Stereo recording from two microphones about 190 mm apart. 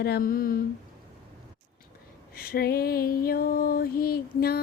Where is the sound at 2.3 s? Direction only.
55° left (ahead or behind).